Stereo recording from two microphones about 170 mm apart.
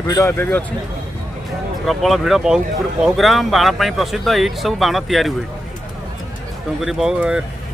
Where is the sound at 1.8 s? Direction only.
Centre (ahead or behind).